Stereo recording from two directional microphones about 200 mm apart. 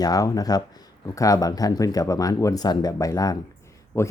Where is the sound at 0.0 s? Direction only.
20° left (ahead or behind).